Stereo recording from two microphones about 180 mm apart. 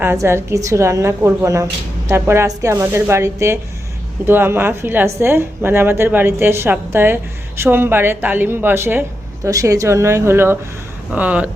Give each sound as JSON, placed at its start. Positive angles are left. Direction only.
{"t": 0.0, "sound": "a woman's voice", "side_deg": -15}